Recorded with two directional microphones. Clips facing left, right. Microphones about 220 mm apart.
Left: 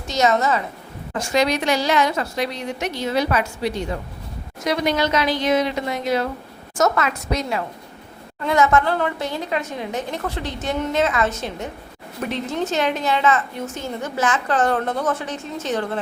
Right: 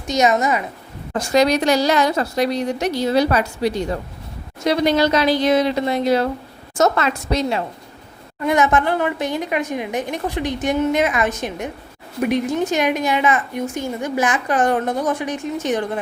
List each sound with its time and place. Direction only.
0.1 s a woman's voice: 15° right (ahead or behind)
1.2 s a woman's voice: 40° right (ahead or behind)
8.4 s a woman's voice: 15° right (ahead or behind)